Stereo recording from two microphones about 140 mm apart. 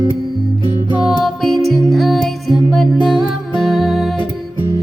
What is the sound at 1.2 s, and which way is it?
Music, centre (ahead or behind).